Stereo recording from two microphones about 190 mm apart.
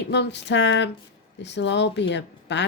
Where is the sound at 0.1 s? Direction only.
65° left (ahead or behind).